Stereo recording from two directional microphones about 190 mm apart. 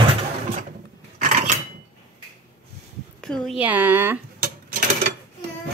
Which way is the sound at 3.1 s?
5° left (ahead or behind).